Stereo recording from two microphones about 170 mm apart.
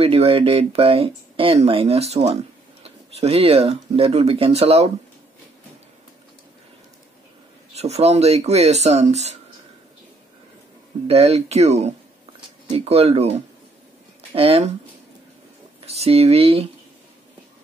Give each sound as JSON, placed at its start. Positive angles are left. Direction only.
{"t": 0.0, "sound": "speech", "side_deg": -35}
{"t": 7.7, "sound": "speech", "side_deg": -40}
{"t": 11.1, "sound": "speech", "side_deg": -35}
{"t": 14.3, "sound": "speech", "side_deg": -35}
{"t": 15.8, "sound": "speech", "side_deg": -35}